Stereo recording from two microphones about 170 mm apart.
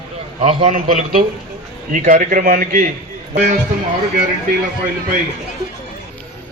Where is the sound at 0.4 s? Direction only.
45° right (ahead or behind).